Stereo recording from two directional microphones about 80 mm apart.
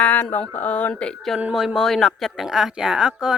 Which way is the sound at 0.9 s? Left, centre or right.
Centre.